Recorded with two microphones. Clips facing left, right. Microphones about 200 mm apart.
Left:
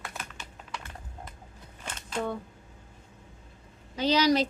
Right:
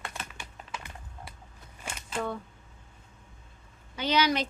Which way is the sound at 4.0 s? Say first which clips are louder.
Left 3 dB; 35° left (ahead or behind).